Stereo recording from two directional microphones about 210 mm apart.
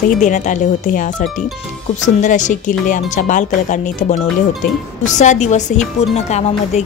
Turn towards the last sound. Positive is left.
turn(degrees=30)  # may be behind; listen again after turning